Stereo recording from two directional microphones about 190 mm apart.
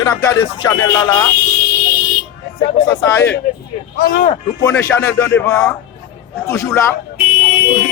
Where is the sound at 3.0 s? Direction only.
15° left (ahead or behind).